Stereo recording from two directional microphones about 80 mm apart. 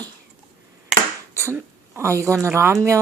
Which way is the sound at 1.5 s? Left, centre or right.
Right.